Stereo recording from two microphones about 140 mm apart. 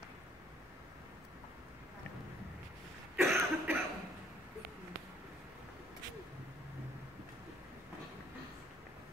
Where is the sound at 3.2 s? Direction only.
15° right (ahead or behind).